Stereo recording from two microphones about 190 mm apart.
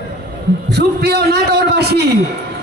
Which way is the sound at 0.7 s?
60° right (ahead or behind).